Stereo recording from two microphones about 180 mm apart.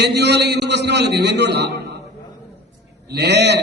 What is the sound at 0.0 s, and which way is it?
A man's voice, 70° right (ahead or behind).